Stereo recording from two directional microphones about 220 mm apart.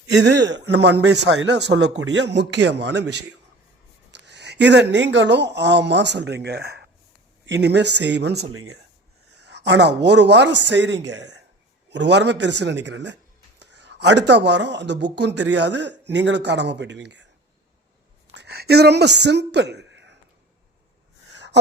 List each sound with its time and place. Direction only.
0.3 s speech: 55° right (ahead or behind)
8.5 s speech: 75° right (ahead or behind)
9.3 s speech: 50° right (ahead or behind)
18.3 s speech: 50° right (ahead or behind)
21.3 s gasp: 55° right (ahead or behind)